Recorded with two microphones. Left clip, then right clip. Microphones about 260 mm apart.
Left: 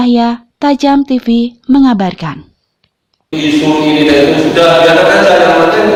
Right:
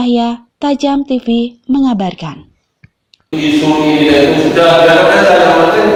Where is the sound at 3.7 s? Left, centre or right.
Centre.